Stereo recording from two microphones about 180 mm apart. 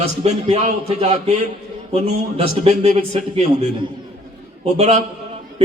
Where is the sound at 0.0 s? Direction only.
35° right (ahead or behind).